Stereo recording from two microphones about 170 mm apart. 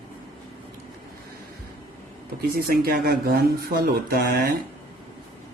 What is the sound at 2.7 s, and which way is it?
Speech, 60° right (ahead or behind).